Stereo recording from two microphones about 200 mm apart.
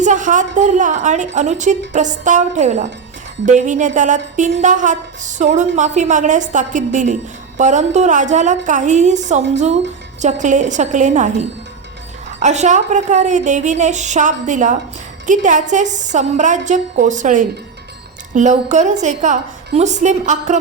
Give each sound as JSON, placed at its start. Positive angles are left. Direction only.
{"t": 0.0, "sound": "a woman's voice", "side_deg": -40}